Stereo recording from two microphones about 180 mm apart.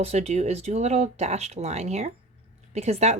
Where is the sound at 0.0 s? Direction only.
35° right (ahead or behind).